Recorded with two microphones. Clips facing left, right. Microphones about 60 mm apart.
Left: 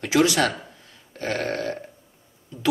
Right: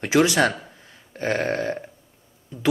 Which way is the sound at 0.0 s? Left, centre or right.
Right.